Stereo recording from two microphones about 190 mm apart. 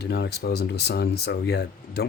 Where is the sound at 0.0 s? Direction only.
60° left (ahead or behind).